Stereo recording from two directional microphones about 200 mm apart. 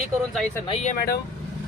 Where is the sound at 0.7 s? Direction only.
30° left (ahead or behind).